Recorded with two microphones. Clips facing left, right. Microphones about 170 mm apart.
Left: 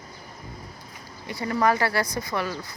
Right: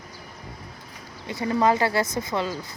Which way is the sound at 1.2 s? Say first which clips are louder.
Right 2 dB; 20° right (ahead or behind).